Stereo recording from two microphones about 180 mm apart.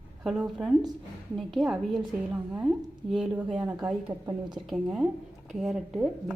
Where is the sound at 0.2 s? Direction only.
5° right (ahead or behind).